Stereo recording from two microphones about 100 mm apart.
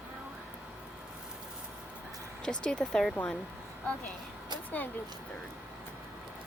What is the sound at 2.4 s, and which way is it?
Speech, 10° left (ahead or behind).